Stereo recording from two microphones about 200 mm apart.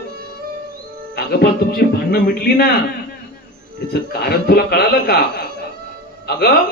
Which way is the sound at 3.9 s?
55° left (ahead or behind).